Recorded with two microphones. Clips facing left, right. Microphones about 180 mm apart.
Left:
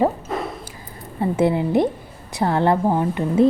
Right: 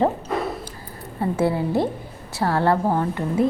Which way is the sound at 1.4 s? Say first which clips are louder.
Left 3 dB; 20° left (ahead or behind).